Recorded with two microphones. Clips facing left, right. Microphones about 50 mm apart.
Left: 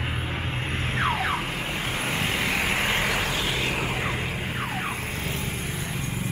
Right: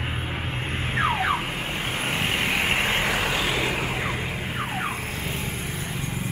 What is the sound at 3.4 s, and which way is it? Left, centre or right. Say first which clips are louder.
Vehicle: right 2 dB; right.